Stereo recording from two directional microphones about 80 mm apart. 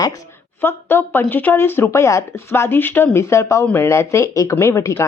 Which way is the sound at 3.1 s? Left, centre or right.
Left.